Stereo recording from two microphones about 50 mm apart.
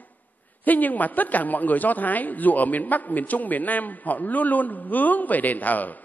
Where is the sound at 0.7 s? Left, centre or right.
Left.